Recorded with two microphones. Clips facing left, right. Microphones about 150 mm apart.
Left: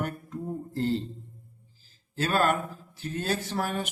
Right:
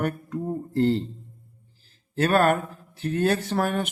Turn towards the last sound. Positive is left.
turn(degrees=-60)  # may be behind; listen again after turning